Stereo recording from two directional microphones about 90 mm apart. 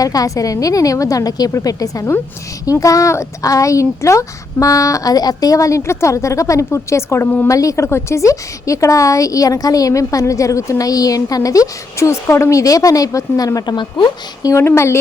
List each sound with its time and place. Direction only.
0.0 s a woman's voice: 40° left (ahead or behind)
13.7 s speech: 60° left (ahead or behind)
14.4 s a woman's voice: 30° left (ahead or behind)